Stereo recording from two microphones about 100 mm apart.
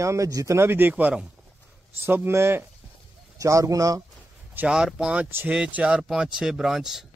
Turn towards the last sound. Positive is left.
turn(degrees=-5)  # may be behind; listen again after turning